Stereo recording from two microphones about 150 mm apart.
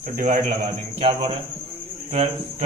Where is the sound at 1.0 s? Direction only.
35° right (ahead or behind).